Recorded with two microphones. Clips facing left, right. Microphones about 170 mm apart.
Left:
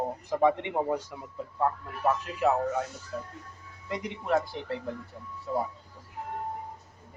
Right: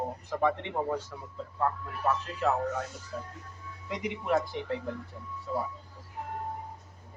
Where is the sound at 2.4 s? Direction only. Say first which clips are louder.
Left 3 dB; 10° left (ahead or behind).